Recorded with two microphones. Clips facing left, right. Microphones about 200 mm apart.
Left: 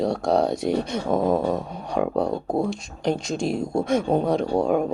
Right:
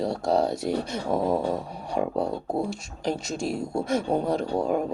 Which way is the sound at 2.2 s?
20° left (ahead or behind).